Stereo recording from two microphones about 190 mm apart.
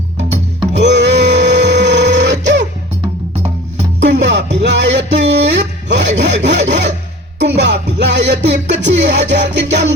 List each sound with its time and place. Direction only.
0.7 s music: 65° right (ahead or behind)
4.0 s music: 70° right (ahead or behind)